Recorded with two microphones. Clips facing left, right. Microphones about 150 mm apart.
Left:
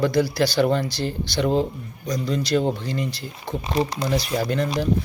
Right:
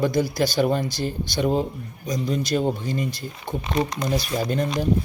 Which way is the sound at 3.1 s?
50° right (ahead or behind).